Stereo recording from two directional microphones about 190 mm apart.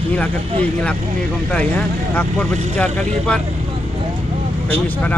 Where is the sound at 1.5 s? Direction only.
5° left (ahead or behind).